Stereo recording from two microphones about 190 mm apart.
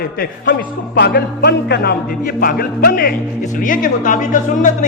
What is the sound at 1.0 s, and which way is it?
Music, 60° left (ahead or behind).